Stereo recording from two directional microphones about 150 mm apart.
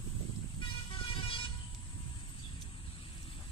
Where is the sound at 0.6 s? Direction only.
35° left (ahead or behind).